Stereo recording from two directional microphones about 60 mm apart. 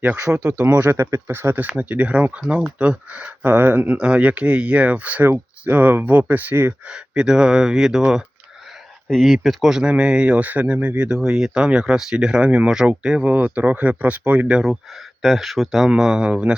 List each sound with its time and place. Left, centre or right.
0.3 s speech: right
0.9 s speech: right
1.6 s speech: right
3.4 s speech: right
3.9 s speech: centre; by 6.7 s right
6.8 s speech: centre
9.0 s speech: centre
13.3 s speech: right
15.2 s speech: centre